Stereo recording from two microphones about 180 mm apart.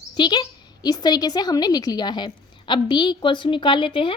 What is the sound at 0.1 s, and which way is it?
A woman's voice, 25° left (ahead or behind).